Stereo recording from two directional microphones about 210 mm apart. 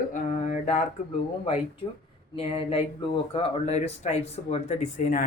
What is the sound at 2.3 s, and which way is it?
Speech, 25° left (ahead or behind).